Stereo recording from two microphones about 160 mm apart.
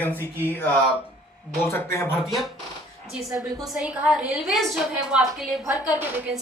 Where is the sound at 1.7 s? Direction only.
15° left (ahead or behind).